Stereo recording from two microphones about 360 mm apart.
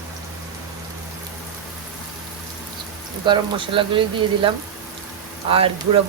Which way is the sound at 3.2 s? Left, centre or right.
Centre.